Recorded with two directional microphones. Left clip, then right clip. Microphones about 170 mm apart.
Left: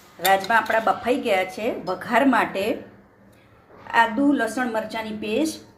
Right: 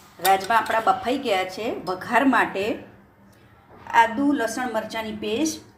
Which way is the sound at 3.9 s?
5° left (ahead or behind).